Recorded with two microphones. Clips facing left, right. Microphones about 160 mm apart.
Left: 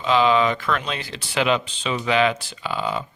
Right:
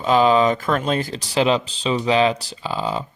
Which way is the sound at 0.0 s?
40° right (ahead or behind).